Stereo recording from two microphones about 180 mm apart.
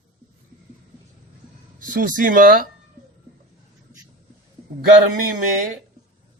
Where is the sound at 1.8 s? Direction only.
50° right (ahead or behind).